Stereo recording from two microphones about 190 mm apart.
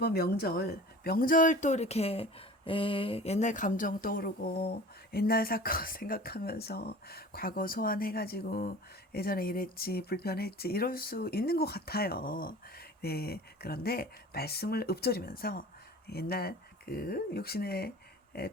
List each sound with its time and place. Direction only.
0.0 s speech: 55° left (ahead or behind)